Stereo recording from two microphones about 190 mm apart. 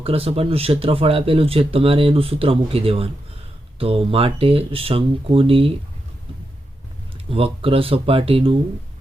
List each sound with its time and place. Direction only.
0.0 s speech: 30° right (ahead or behind)
7.3 s speech: 30° right (ahead or behind)